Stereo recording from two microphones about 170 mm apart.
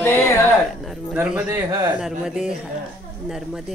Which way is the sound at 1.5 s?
15° right (ahead or behind).